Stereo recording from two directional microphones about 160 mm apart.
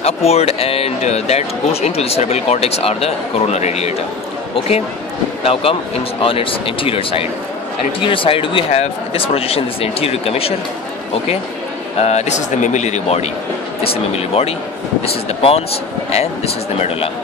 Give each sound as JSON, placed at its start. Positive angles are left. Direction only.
{"t": 0.0, "sound": "speech", "side_deg": 40}
{"t": 5.4, "sound": "speech", "side_deg": 35}
{"t": 12.0, "sound": "speech", "side_deg": 45}